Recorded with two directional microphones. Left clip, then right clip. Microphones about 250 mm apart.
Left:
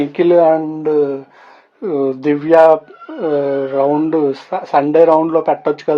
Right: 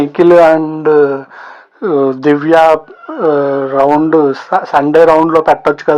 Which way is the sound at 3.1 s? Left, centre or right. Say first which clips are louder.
Right 5 dB; centre.